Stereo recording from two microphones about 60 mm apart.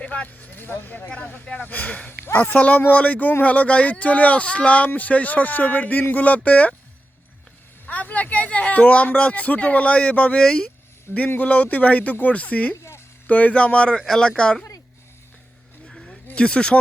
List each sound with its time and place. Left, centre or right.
0.0 s speech: left
7.9 s speech: left
15.9 s a sound: centre
16.2 s speech: left